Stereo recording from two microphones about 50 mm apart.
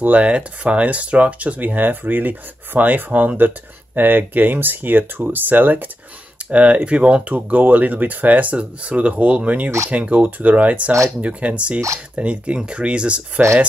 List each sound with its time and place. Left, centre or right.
0.0 s speech: right